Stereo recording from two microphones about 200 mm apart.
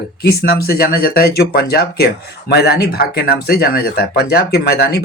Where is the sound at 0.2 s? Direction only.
50° left (ahead or behind).